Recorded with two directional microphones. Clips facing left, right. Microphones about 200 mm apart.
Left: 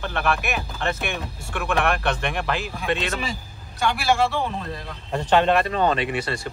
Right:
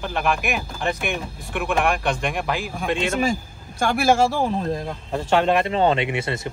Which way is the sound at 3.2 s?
50° right (ahead or behind).